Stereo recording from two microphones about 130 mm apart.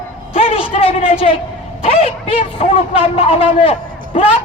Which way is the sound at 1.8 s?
45° left (ahead or behind).